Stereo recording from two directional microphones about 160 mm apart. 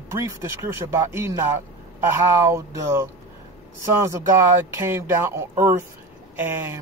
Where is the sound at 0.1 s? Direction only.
15° right (ahead or behind).